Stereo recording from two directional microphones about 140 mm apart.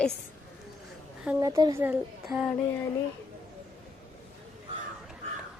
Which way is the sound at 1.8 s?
10° right (ahead or behind).